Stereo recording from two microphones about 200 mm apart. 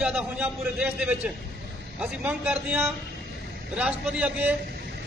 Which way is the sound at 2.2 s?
10° right (ahead or behind).